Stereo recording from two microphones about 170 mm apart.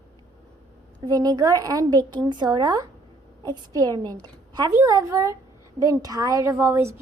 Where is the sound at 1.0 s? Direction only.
20° right (ahead or behind).